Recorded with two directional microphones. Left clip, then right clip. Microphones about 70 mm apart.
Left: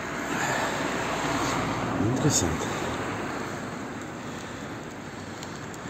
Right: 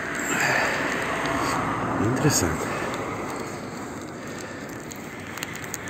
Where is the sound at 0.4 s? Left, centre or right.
Right.